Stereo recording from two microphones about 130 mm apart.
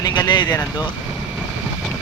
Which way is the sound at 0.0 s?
35° left (ahead or behind).